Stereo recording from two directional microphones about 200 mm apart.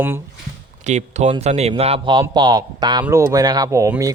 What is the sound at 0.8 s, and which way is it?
Speech, 35° right (ahead or behind).